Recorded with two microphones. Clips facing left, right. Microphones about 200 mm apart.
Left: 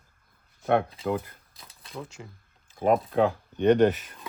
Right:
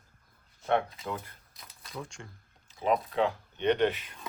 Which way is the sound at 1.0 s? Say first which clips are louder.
Left 9 dB; 30° left (ahead or behind).